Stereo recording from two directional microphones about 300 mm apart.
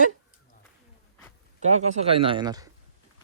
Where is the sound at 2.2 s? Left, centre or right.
Centre.